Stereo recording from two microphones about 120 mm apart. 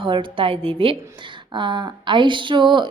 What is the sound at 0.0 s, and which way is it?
A woman's voice, 45° right (ahead or behind).